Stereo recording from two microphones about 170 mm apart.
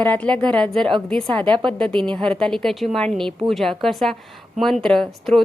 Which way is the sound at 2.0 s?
30° right (ahead or behind).